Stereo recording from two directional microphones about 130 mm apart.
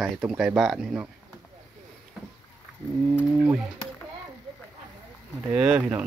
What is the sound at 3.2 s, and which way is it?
Speech, 10° right (ahead or behind).